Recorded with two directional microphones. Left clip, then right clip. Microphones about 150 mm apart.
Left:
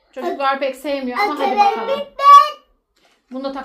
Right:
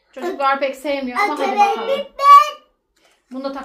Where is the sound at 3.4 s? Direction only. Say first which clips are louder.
Left 1 dB; 40° left (ahead or behind).